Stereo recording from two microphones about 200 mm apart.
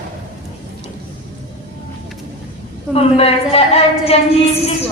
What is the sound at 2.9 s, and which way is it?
A woman's voice, 30° left (ahead or behind).